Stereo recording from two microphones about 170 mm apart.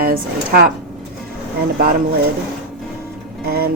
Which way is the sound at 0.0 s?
60° right (ahead or behind).